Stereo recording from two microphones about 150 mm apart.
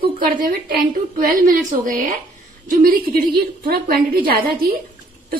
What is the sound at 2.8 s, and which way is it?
A woman's voice, 80° right.